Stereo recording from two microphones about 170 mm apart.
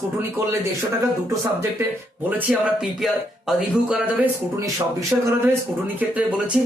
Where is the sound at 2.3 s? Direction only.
10° right (ahead or behind).